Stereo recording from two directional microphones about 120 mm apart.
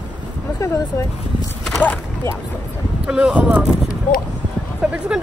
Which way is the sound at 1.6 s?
10° left (ahead or behind).